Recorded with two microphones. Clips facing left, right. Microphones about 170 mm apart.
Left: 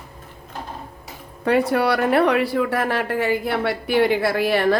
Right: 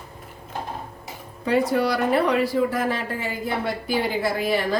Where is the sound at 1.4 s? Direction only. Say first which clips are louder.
Left 2 dB; 65° left (ahead or behind).